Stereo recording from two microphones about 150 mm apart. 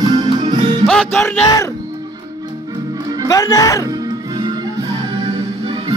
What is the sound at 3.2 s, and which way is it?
Speech, 25° left (ahead or behind).